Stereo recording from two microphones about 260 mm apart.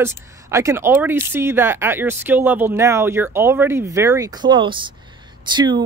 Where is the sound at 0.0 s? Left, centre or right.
Centre.